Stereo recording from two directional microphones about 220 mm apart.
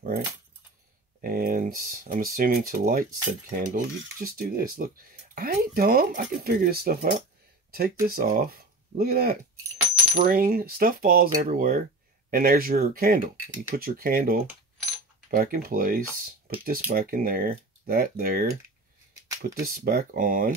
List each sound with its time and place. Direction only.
1.2 s speech: 40° right (ahead or behind)
19.2 s a sound: 15° right (ahead or behind)
19.6 s speech: 40° right (ahead or behind)